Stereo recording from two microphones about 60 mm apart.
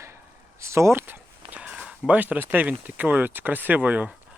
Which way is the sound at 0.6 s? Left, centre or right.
Right.